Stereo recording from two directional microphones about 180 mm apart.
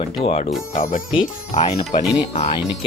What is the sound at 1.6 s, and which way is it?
Speech, 35° left (ahead or behind).